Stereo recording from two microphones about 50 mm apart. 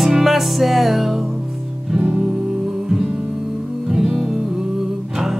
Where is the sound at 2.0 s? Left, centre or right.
Right.